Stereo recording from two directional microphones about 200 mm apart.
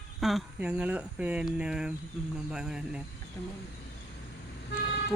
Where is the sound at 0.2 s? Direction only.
Centre (ahead or behind).